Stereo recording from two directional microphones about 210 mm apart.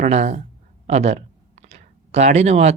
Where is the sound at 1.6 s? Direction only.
30° right (ahead or behind).